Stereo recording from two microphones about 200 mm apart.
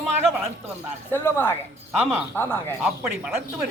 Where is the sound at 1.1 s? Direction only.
10° left (ahead or behind).